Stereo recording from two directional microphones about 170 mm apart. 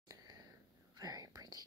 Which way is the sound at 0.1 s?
20° right (ahead or behind).